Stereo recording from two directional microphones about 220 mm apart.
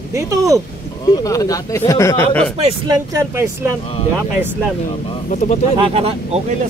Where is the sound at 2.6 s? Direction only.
20° right (ahead or behind).